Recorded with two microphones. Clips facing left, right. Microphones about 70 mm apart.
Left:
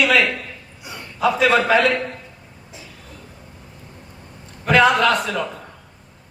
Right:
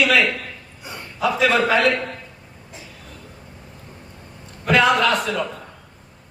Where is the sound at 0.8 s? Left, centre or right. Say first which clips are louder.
Even; right.